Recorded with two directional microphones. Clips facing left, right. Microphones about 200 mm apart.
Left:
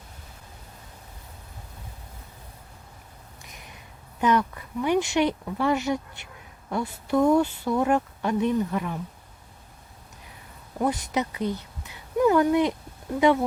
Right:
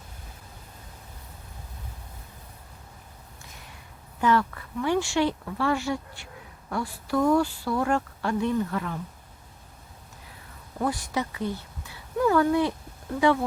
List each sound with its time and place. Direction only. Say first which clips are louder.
3.4 s a sound: left 1 dB; 20° left (ahead or behind)
4.2 s speech: left 1 dB; 20° left (ahead or behind)
10.8 s a woman's voice: left 2 dB; 20° left (ahead or behind)